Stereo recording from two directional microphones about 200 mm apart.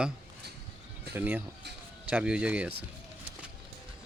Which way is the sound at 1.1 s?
10° right (ahead or behind).